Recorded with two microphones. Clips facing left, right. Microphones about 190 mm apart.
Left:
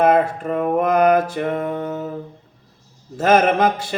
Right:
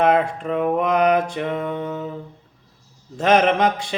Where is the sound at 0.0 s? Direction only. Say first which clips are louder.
Left 2 dB; 5° left (ahead or behind).